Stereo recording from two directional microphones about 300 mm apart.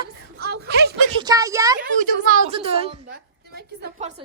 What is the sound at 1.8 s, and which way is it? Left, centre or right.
A child's voice, right.